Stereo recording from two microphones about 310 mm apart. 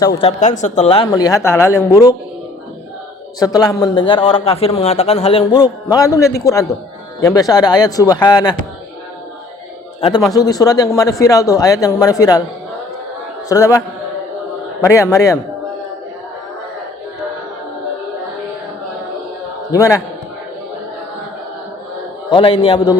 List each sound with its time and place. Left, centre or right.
0.2 s a man's voice: left
3.4 s a man's voice: centre
10.3 s a man's voice: centre
13.5 s a man's voice: centre
19.7 s a man's voice: centre
22.3 s a man's voice: centre